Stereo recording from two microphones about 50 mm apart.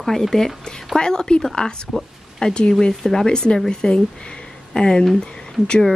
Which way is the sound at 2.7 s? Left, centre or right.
Centre.